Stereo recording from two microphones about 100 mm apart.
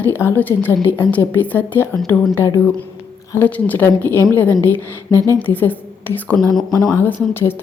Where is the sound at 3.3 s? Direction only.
20° left (ahead or behind).